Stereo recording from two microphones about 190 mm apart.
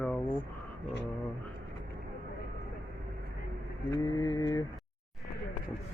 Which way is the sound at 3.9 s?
20° left (ahead or behind).